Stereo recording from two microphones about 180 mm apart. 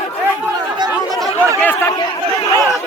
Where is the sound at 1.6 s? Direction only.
10° left (ahead or behind).